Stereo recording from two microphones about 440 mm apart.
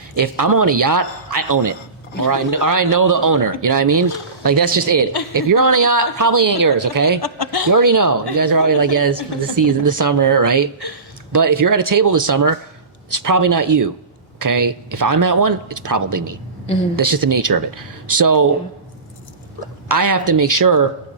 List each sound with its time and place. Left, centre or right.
0.2 s speech: right
7.2 s speech: left
7.7 s speech: right
19.9 s speech: right